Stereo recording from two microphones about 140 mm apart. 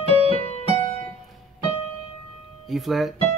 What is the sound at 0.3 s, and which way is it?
Music, 45° left (ahead or behind).